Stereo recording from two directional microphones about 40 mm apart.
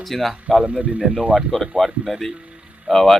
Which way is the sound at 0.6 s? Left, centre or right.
Right.